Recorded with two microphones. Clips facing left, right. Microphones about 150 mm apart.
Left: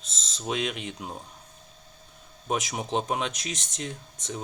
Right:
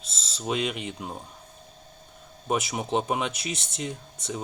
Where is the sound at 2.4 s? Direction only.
5° right (ahead or behind).